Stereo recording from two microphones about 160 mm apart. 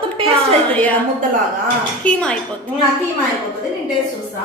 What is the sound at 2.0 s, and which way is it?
Speech, 5° left (ahead or behind).